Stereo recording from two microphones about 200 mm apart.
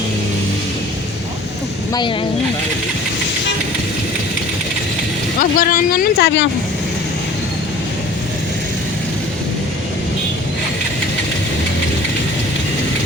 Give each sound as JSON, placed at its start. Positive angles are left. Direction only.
{"t": 1.9, "sound": "speech", "side_deg": 20}
{"t": 5.4, "sound": "speech", "side_deg": 45}
{"t": 6.1, "sound": "speech", "side_deg": 60}